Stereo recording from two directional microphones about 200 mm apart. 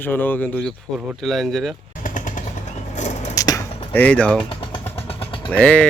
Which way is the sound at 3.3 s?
15° left (ahead or behind).